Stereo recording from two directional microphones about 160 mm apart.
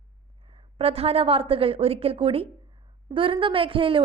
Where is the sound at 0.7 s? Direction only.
40° right (ahead or behind).